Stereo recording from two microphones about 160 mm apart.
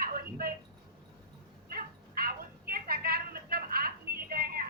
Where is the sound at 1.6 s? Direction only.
65° right (ahead or behind).